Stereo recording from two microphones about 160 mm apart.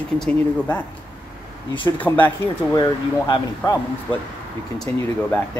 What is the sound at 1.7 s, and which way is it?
Speech, 30° left (ahead or behind).